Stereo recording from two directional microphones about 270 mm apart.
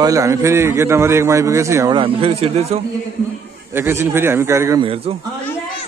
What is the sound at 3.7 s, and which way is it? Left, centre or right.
A man's voice, centre.